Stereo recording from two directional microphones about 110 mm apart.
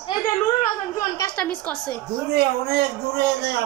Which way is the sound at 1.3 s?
10° left (ahead or behind).